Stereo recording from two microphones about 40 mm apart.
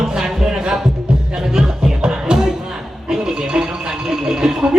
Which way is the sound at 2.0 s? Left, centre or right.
Right.